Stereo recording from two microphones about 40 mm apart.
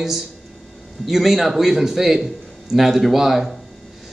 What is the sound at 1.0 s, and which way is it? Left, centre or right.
A man's voice, centre.